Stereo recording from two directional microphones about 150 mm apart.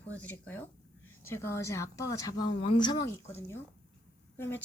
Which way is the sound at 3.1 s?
15° left (ahead or behind).